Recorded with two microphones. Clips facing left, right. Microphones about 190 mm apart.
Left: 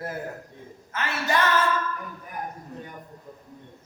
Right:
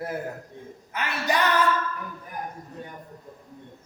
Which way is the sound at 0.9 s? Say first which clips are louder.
Even; 15° right (ahead or behind).